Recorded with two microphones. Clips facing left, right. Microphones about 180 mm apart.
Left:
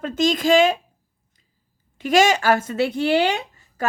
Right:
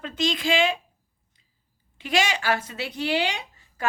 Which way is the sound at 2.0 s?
45° left (ahead or behind).